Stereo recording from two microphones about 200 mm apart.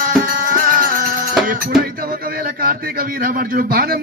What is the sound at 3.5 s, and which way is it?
Speech, 45° right (ahead or behind).